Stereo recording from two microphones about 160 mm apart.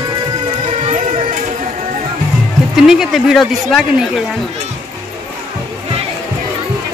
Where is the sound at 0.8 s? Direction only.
45° right (ahead or behind).